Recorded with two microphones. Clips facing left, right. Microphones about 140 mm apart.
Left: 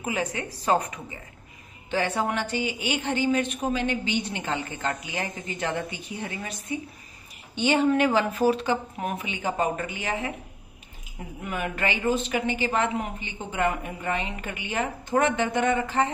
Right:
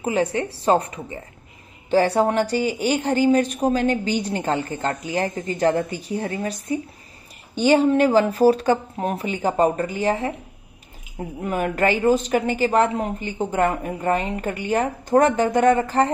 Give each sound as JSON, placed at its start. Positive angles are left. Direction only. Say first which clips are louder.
{"t": 0.0, "sound": "a woman's voice", "louder": "right 7 dB", "side_deg": -30}
{"t": 11.4, "sound": "a woman's voice", "louder": "right 8 dB", "side_deg": -40}